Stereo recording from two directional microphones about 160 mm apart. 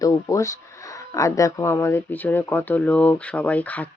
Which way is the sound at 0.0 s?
20° left (ahead or behind).